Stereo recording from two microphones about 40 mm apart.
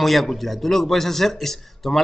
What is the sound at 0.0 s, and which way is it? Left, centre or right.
A man's voice, centre.